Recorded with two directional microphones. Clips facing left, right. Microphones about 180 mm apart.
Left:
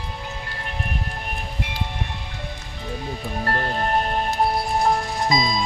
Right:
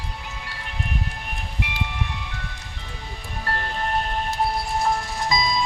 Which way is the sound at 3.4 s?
40° left (ahead or behind).